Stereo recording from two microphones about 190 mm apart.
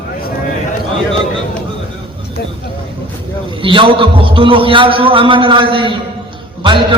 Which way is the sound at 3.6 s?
25° right (ahead or behind).